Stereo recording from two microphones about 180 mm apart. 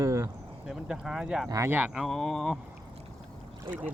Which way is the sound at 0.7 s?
Centre (ahead or behind).